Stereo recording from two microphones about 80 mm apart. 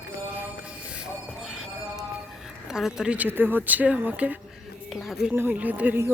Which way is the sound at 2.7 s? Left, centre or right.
Centre.